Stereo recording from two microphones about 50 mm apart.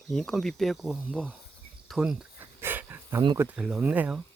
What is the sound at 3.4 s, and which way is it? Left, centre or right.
Speech, right.